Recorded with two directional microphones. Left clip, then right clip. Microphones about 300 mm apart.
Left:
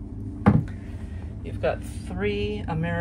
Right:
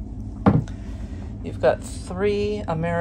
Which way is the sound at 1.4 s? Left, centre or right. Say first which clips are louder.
Right 7 dB; centre.